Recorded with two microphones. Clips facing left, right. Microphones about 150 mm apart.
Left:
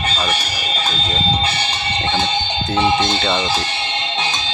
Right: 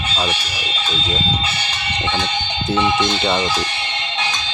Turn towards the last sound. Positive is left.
turn(degrees=-15)  # may be behind; listen again after turning